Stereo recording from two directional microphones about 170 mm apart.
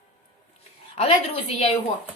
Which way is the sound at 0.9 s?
35° left (ahead or behind).